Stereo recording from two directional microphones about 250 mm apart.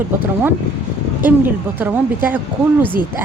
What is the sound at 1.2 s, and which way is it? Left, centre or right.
A woman's voice, centre.